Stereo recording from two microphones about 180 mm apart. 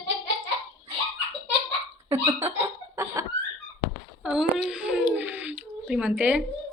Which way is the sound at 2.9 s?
15° right (ahead or behind).